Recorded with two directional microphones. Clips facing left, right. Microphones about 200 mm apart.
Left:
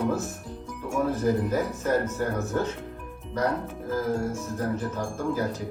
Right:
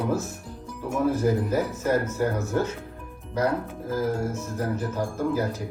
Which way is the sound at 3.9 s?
Centre (ahead or behind).